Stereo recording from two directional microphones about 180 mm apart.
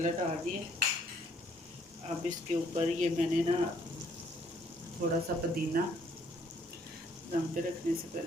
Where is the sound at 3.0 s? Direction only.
40° right (ahead or behind).